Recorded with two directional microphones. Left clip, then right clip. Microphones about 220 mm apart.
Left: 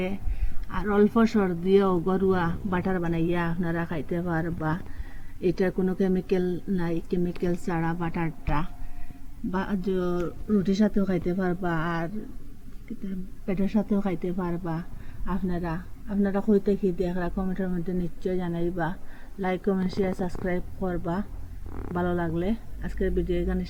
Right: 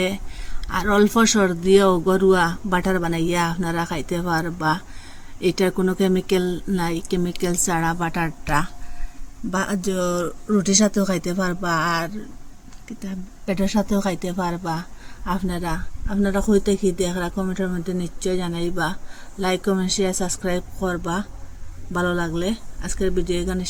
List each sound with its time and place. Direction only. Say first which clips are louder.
0.7 s speech: right 5 dB; 45° right (ahead or behind)